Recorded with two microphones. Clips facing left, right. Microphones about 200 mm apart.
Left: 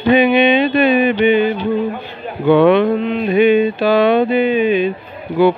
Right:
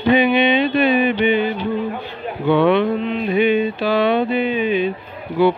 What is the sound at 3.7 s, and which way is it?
Music, 45° left (ahead or behind).